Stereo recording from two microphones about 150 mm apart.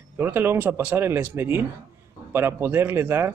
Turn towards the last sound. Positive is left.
turn(degrees=-15)  # may be behind; listen again after turning